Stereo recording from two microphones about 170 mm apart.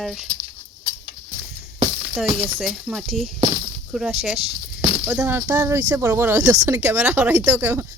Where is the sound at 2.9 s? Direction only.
5° right (ahead or behind).